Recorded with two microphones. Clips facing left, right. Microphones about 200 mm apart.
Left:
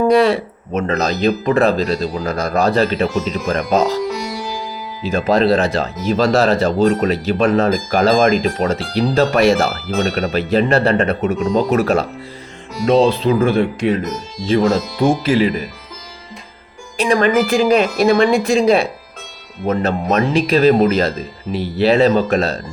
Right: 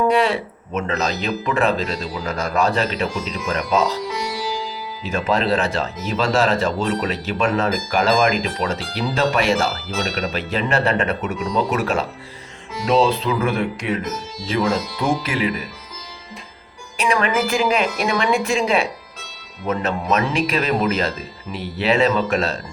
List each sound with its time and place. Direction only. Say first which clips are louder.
0.0 s speech: left 5 dB; 40° left (ahead or behind)
5.0 s speech: left 6 dB; 35° left (ahead or behind); by 10.2 s 55° left (ahead or behind)
10.3 s speech: left 8 dB; 40° left (ahead or behind)
14.6 s speech: left 4 dB; 50° left (ahead or behind)
15.2 s speech: left 7 dB; 30° left (ahead or behind)
17.0 s speech: left 6 dB; 35° left (ahead or behind)